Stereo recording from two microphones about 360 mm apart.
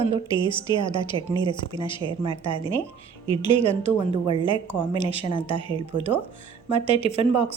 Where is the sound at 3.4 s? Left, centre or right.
Centre.